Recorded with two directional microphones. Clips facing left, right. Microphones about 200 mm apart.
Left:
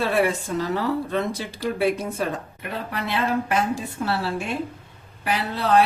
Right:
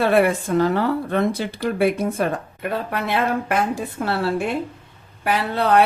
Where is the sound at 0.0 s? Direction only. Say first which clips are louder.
Right 5 dB; 60° right (ahead or behind).